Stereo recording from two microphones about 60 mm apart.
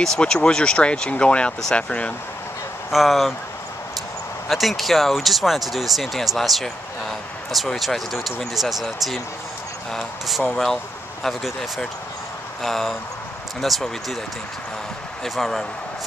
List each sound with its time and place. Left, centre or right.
0.2 s speech: centre
2.9 s speech: centre
4.5 s speech: centre
15.2 s speech: centre